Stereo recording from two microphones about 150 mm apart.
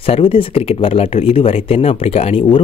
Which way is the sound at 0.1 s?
35° left (ahead or behind).